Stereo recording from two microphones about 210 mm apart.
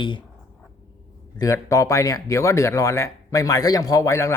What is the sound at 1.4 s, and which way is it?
Speech, 15° left (ahead or behind).